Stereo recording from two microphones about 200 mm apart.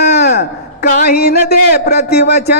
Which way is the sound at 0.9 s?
45° left (ahead or behind).